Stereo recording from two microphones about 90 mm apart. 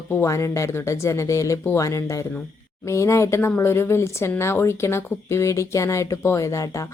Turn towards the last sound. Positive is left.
turn(degrees=35)  # may be behind; listen again after turning